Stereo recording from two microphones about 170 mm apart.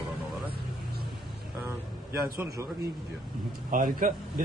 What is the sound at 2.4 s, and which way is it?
Speech, 20° right (ahead or behind).